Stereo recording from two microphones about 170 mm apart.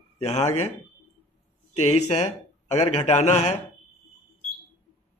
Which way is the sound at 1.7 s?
45° left (ahead or behind).